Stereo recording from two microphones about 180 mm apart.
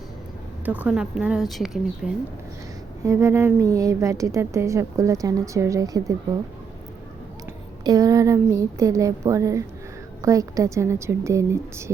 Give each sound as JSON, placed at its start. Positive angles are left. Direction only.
{"t": 0.6, "sound": "speech", "side_deg": -10}
{"t": 3.0, "sound": "a woman's voice", "side_deg": -15}
{"t": 7.9, "sound": "a woman's voice", "side_deg": -20}